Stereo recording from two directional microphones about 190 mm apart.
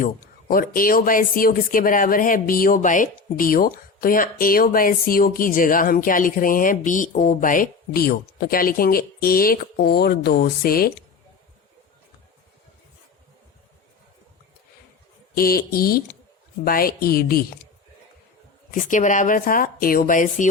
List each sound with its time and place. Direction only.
0.0 s speech: 45° left (ahead or behind)
15.4 s speech: 50° left (ahead or behind)
18.7 s speech: 40° left (ahead or behind)